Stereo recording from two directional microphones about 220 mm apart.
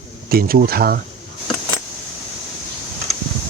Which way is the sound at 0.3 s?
45° right (ahead or behind).